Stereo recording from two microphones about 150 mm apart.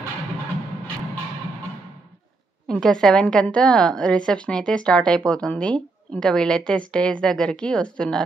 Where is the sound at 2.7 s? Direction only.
5° left (ahead or behind).